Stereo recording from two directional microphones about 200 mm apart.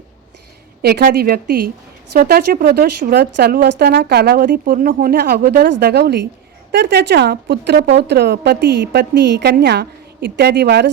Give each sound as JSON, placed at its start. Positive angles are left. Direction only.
{"t": 0.8, "sound": "a woman's voice", "side_deg": -50}